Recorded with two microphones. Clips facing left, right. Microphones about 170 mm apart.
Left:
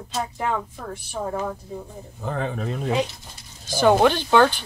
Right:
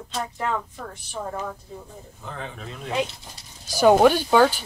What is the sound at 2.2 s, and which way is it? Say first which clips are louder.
Speech: left 9 dB; 50° left (ahead or behind).